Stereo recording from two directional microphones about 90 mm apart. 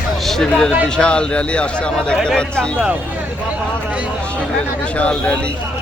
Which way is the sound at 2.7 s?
15° right (ahead or behind).